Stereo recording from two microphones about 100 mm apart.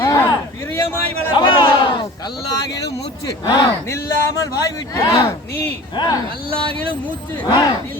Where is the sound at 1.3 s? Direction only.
55° left (ahead or behind).